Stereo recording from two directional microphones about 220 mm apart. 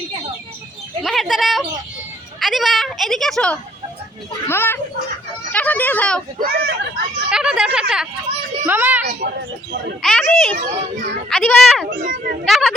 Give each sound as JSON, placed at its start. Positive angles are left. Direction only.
{"t": 1.0, "sound": "a child's voice", "side_deg": 0}
{"t": 6.4, "sound": "a child's voice", "side_deg": -45}
{"t": 7.3, "sound": "a child's voice", "side_deg": -5}
{"t": 10.6, "sound": "a child's voice", "side_deg": -45}
{"t": 11.3, "sound": "speech", "side_deg": 0}
{"t": 11.9, "sound": "a child's voice", "side_deg": -35}
{"t": 12.5, "sound": "speech", "side_deg": 0}